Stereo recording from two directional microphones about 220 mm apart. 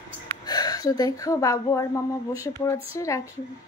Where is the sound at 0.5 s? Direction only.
15° left (ahead or behind).